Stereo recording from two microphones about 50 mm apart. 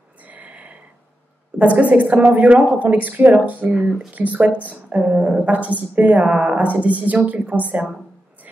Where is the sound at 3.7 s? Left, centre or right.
Centre.